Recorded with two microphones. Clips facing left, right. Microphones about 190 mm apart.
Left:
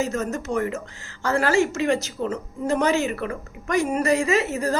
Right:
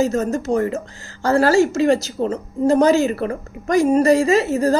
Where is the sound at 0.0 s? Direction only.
35° right (ahead or behind).